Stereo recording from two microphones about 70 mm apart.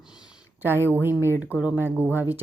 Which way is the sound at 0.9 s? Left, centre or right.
Right.